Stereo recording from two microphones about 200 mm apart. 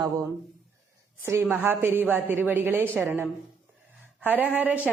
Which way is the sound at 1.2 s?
10° right (ahead or behind).